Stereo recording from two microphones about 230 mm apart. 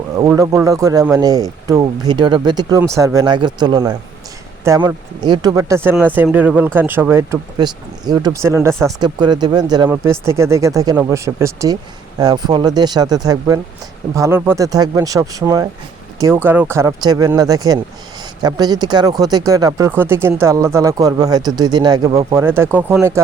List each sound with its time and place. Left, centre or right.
0.2 s speech: centre